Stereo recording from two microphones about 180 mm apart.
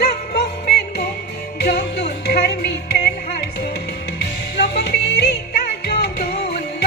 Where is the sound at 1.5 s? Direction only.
60° left (ahead or behind).